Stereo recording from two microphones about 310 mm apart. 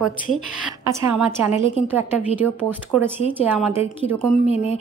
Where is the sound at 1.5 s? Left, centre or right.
Centre.